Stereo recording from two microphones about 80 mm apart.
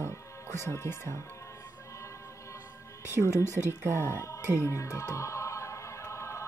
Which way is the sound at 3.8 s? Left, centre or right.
Right.